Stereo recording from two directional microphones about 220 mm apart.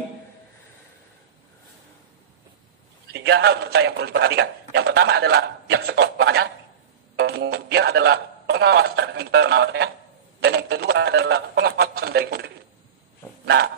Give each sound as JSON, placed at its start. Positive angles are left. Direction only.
{"t": 3.1, "sound": "a man's voice", "side_deg": -50}